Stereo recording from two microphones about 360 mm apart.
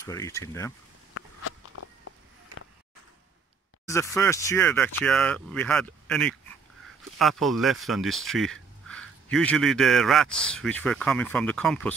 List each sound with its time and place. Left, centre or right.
0.0 s speech: centre
1.1 s a sound: left
3.8 s a man's voice: centre